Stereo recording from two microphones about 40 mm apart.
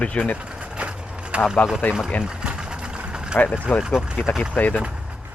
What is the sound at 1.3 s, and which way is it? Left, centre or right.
Speech, right.